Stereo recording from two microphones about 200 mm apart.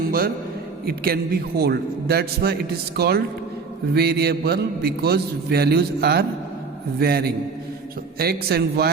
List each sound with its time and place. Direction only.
0.9 s a man's voice: 50° right (ahead or behind)